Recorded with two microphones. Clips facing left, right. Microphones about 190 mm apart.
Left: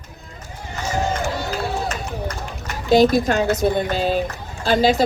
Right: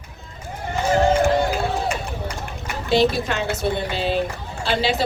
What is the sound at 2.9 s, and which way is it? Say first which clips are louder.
Speech: left 5 dB; 45° left (ahead or behind).